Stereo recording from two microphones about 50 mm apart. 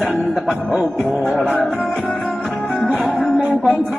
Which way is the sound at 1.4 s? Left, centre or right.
Centre.